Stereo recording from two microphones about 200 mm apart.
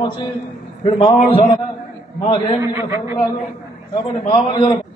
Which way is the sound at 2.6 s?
10° right (ahead or behind).